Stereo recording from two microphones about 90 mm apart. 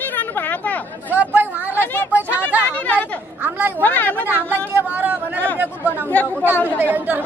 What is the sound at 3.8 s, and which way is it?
Speech, 20° left (ahead or behind).